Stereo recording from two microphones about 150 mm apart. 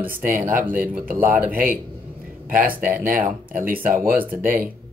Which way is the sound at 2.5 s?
75° right (ahead or behind).